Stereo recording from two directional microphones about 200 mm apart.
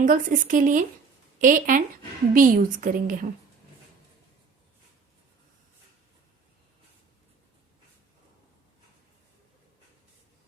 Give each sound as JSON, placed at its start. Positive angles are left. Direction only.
{"t": 0.0, "sound": "a woman's voice", "side_deg": -40}